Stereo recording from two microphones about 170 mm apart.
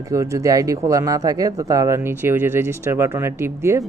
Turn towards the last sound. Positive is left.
turn(degrees=-15)  # may be behind; listen again after turning